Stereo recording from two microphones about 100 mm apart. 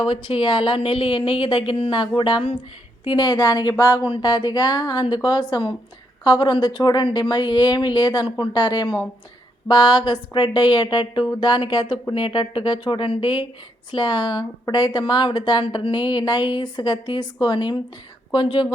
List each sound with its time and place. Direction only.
0.0 s a woman's voice: 60° left (ahead or behind); by 4.0 s 35° left (ahead or behind)
4.0 s speech: 50° left (ahead or behind)